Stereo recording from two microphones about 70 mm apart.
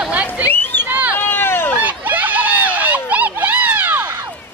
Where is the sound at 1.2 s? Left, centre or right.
Left.